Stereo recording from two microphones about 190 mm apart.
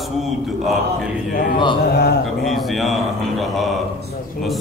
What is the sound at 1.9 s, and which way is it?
Speech, 60° left (ahead or behind).